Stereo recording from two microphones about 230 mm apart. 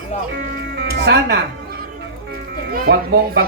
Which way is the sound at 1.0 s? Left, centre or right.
Right.